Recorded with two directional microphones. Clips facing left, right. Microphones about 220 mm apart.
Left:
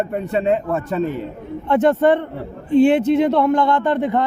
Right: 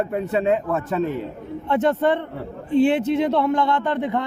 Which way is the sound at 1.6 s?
50° left (ahead or behind).